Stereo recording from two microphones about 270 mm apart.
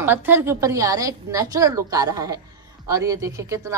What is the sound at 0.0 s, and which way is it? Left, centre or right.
A woman's voice, centre.